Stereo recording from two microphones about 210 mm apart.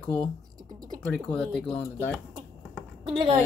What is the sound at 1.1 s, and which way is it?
Speech, 5° left (ahead or behind).